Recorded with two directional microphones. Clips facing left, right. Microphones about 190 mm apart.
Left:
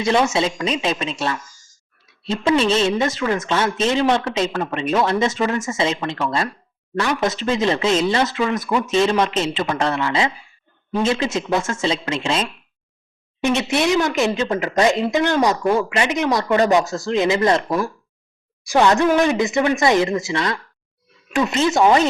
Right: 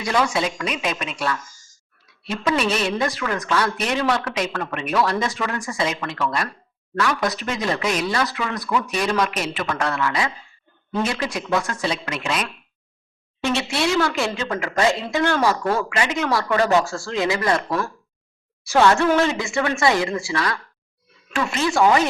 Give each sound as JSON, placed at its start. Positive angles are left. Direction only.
{"t": 0.0, "sound": "speech", "side_deg": 25}